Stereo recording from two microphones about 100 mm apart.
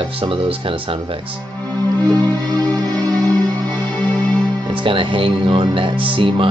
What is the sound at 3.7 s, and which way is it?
Music, 15° left (ahead or behind).